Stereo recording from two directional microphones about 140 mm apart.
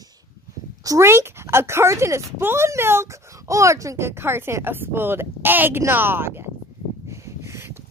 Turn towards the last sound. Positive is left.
turn(degrees=-20)  # may be behind; listen again after turning